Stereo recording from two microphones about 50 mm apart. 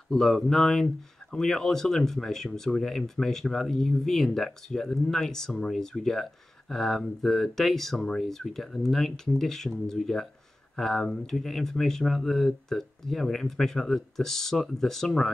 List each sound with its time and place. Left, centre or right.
0.1 s speech: centre